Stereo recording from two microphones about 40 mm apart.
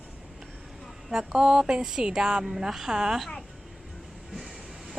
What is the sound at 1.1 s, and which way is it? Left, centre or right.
Speech, centre.